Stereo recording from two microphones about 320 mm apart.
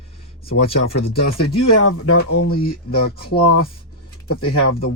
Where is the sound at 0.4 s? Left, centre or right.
Left.